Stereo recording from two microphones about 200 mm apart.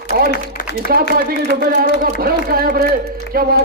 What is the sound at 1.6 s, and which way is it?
Speech, 50° right (ahead or behind).